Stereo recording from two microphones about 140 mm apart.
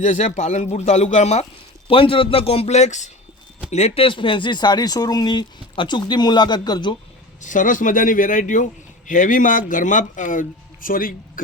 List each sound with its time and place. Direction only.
0.0 s speech: 60° left (ahead or behind)
1.9 s speech: 40° left (ahead or behind)
7.4 s speech: 70° left (ahead or behind); by 11.4 s 85° left